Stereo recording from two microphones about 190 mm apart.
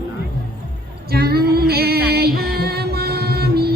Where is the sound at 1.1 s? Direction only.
55° right (ahead or behind).